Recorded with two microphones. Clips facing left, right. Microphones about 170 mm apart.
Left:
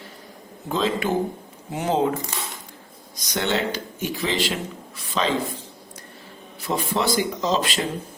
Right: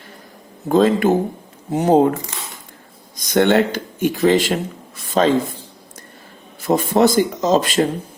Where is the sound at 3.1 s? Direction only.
50° right (ahead or behind).